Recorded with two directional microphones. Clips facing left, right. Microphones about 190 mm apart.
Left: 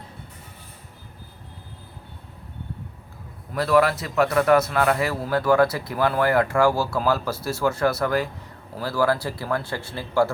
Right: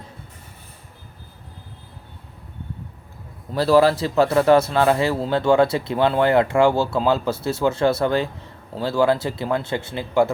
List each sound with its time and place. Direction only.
3.5 s a man's voice: 30° right (ahead or behind)